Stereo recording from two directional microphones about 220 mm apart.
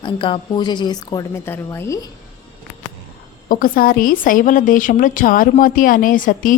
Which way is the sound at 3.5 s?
40° left (ahead or behind).